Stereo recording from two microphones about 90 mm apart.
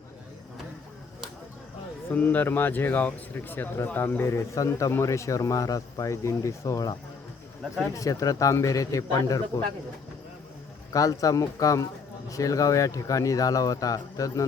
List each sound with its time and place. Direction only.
2.0 s speech: 20° left (ahead or behind); by 6.9 s 40° left (ahead or behind)
7.9 s speech: 35° left (ahead or behind)
10.9 s speech: 40° left (ahead or behind)